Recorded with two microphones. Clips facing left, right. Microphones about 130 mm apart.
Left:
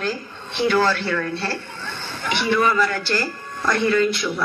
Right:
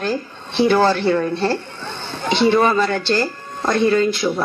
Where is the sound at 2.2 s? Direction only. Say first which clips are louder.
Right 5 dB; 25° right (ahead or behind).